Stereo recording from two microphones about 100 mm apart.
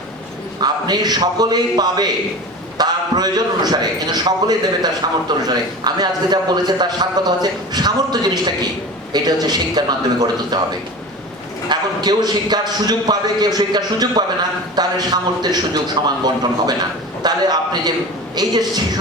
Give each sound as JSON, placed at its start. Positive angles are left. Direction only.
{"t": 0.6, "sound": "a man's voice", "side_deg": -45}